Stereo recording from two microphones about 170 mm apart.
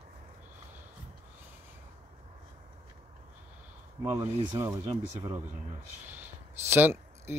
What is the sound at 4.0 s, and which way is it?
Speech, 20° right (ahead or behind).